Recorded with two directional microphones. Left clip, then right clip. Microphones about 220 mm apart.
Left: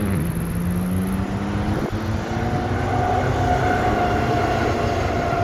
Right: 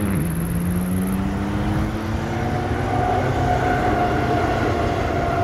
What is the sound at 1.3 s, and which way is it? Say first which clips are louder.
Vehicle: right 1 dB; 5° left (ahead or behind).